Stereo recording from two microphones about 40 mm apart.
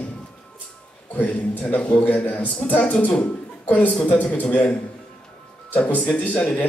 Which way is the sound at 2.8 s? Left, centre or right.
Left.